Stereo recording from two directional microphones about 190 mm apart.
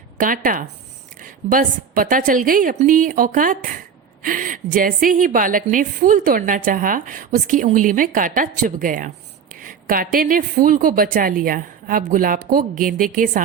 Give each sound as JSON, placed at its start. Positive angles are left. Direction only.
{"t": 0.2, "sound": "a woman's voice", "side_deg": -45}